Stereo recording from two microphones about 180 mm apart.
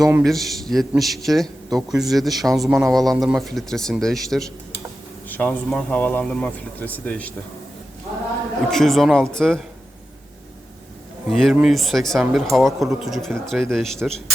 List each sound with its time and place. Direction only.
0.0 s a man's voice: 15° right (ahead or behind)
0.3 s a man's voice: centre (ahead or behind)
8.7 s a man's voice: centre (ahead or behind)
11.3 s a man's voice: centre (ahead or behind)